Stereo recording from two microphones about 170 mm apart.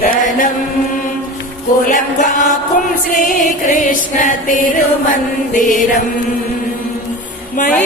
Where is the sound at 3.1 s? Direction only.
50° left (ahead or behind).